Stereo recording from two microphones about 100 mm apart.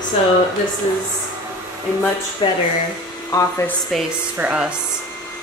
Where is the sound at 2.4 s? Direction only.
50° left (ahead or behind).